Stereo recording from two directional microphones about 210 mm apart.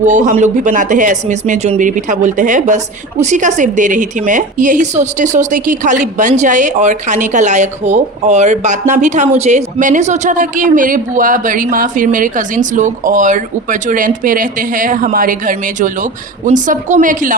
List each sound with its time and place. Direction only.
0.0 s speech: 35° right (ahead or behind)